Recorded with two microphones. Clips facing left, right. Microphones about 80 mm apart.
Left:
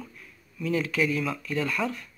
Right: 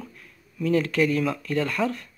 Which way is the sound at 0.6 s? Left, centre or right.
Right.